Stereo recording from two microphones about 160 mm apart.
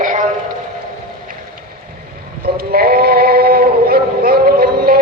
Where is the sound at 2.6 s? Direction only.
70° right (ahead or behind).